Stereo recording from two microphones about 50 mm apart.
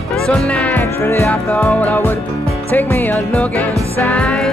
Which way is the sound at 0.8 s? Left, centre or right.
Left.